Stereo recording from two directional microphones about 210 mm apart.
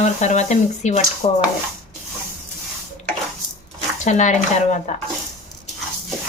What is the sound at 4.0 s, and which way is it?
Speech, 35° left (ahead or behind).